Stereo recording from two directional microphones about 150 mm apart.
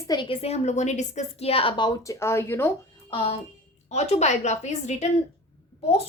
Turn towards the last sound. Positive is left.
turn(degrees=45)  # may be behind; listen again after turning